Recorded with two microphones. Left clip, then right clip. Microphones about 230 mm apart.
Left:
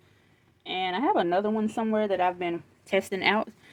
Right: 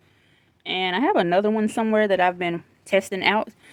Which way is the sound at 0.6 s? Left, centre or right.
Right.